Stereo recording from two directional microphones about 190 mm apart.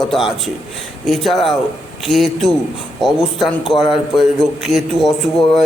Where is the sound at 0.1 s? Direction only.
Centre (ahead or behind).